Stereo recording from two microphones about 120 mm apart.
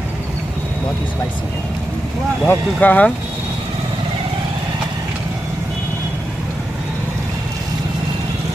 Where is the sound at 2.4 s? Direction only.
15° left (ahead or behind).